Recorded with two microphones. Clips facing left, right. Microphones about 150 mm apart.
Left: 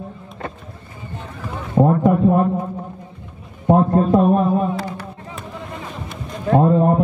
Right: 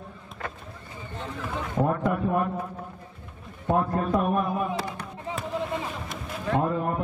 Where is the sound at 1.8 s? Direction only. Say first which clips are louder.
Left 10 dB; 30° left (ahead or behind).